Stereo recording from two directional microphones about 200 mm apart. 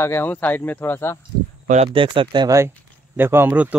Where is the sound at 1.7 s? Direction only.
30° right (ahead or behind).